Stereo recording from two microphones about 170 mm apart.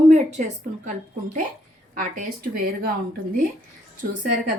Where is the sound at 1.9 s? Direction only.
55° right (ahead or behind).